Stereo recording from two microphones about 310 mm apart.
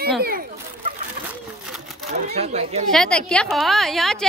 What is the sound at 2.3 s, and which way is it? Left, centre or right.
Speech, right.